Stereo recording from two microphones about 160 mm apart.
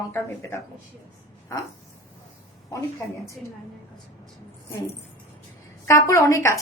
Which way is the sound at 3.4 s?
Centre (ahead or behind).